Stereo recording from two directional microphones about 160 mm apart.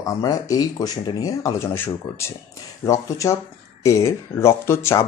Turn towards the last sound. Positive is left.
turn(degrees=15)  # may be behind; listen again after turning